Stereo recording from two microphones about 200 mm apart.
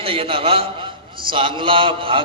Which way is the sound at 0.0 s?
30° right (ahead or behind).